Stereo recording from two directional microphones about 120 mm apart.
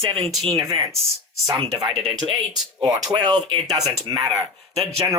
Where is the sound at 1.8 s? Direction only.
40° right (ahead or behind).